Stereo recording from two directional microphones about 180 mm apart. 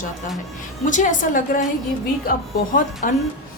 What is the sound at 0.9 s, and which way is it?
Speech, 45° left (ahead or behind).